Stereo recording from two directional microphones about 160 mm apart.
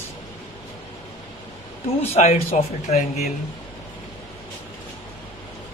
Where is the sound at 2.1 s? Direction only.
40° left (ahead or behind).